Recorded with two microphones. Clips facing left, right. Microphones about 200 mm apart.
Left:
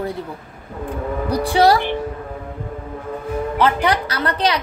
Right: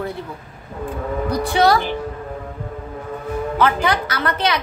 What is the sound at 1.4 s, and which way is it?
Speech, 30° left (ahead or behind).